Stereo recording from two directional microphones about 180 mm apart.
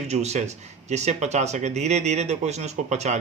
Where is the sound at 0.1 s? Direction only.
40° right (ahead or behind).